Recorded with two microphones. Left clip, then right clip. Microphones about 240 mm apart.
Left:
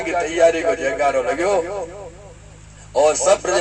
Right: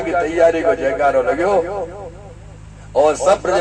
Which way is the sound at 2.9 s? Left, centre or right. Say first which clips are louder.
Right 2 dB; left.